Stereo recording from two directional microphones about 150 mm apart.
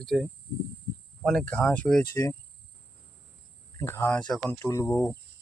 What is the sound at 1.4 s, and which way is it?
Speech, 10° left (ahead or behind).